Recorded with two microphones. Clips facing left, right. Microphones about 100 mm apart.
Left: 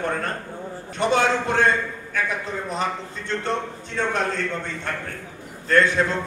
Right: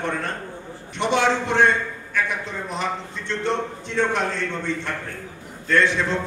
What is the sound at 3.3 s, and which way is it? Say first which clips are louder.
Speech: right 1 dB; 40° left (ahead or behind).